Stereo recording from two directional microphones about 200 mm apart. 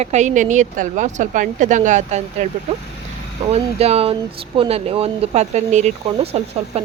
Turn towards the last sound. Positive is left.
turn(degrees=-30)  # may be behind; listen again after turning